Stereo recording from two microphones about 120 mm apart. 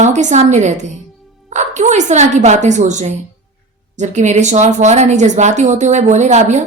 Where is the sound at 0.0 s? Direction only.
80° right.